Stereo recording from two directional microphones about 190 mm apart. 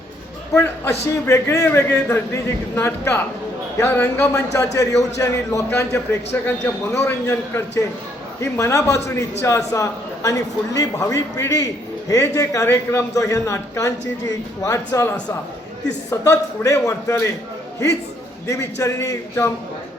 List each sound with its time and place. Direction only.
0.5 s a man's voice: 15° left (ahead or behind)
18.4 s a man's voice: 15° left (ahead or behind)